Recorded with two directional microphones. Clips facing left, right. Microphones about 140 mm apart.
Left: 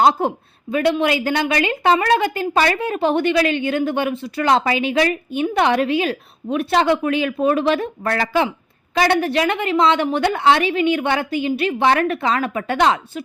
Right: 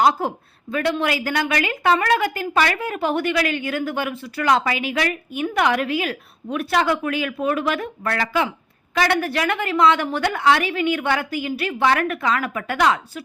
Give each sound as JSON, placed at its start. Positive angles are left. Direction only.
{"t": 0.0, "sound": "a woman's voice", "side_deg": 25}